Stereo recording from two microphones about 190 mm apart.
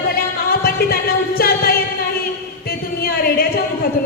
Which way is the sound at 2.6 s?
55° left (ahead or behind).